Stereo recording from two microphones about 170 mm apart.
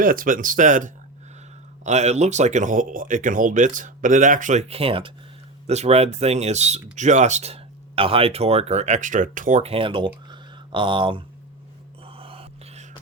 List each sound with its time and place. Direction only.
0.0 s speech: 55° right (ahead or behind); by 10.1 s 30° right (ahead or behind)
10.2 s a sound: 25° right (ahead or behind)
12.0 s gasp: 35° right (ahead or behind)